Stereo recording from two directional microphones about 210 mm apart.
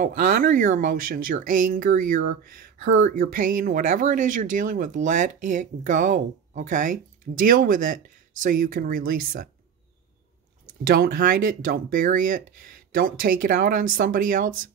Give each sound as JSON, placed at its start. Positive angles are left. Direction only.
{"t": 0.0, "sound": "speech", "side_deg": -40}
{"t": 10.8, "sound": "speech", "side_deg": -45}